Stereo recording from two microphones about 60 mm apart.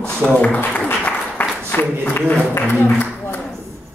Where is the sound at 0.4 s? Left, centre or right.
Left.